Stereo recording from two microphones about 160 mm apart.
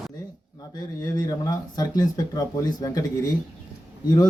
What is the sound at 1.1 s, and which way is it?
Speech, 25° left (ahead or behind).